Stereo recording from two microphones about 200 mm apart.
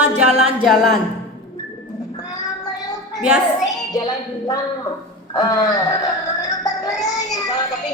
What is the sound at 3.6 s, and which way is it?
Speech, 20° left (ahead or behind).